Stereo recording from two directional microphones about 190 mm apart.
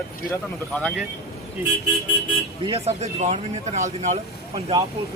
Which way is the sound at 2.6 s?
30° right (ahead or behind).